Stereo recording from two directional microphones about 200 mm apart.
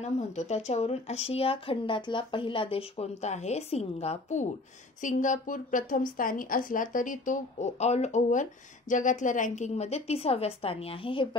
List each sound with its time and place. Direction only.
0.0 s a woman's voice: 35° left (ahead or behind)